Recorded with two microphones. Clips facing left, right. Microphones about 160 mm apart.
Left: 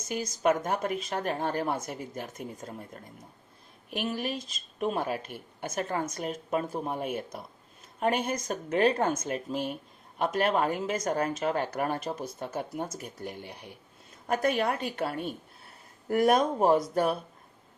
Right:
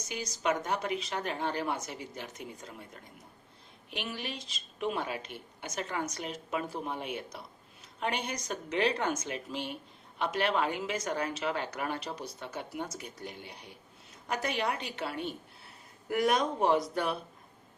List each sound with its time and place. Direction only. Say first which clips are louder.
0.0 s a woman's voice: left 6 dB; 50° left (ahead or behind)